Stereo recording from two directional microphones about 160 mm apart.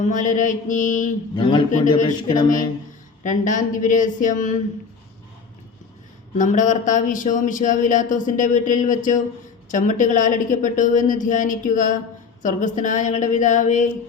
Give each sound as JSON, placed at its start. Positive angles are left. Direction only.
{"t": 0.0, "sound": "speech", "side_deg": 55}
{"t": 1.4, "sound": "a man's voice", "side_deg": 30}
{"t": 2.0, "sound": "speech", "side_deg": 50}
{"t": 6.3, "sound": "speech", "side_deg": 50}